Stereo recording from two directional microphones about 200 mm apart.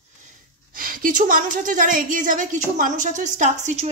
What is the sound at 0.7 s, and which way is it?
A woman's voice, 45° right (ahead or behind).